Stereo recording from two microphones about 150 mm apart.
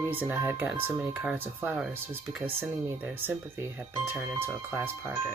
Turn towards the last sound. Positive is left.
turn(degrees=-15)  # may be behind; listen again after turning